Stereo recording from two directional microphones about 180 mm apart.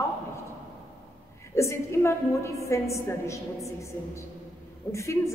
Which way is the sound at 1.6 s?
15° left (ahead or behind).